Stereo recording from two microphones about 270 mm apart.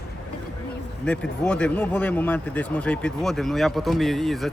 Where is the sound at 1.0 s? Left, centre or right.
Centre.